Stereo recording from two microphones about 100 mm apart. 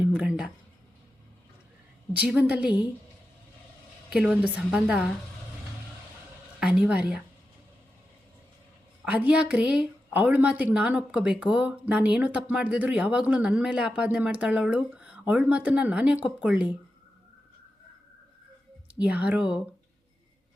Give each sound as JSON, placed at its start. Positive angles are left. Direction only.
{"t": 0.0, "sound": "a sound", "side_deg": -15}
{"t": 2.1, "sound": "a woman's voice", "side_deg": -10}
{"t": 4.1, "sound": "a woman's voice", "side_deg": -10}
{"t": 6.6, "sound": "a woman's voice", "side_deg": -10}
{"t": 9.0, "sound": "a woman's voice", "side_deg": -15}
{"t": 18.9, "sound": "a woman's voice", "side_deg": -15}